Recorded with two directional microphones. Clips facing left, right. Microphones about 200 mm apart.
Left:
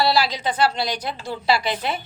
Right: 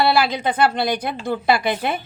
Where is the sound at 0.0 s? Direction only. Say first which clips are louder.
Right 2 dB; 55° right (ahead or behind).